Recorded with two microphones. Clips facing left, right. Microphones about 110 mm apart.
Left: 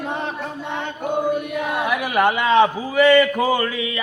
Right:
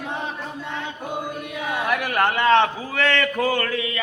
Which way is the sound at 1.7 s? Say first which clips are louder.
Left 1 dB; 10° left (ahead or behind).